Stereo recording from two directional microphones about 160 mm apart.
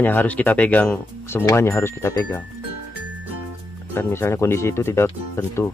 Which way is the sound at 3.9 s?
15° left (ahead or behind).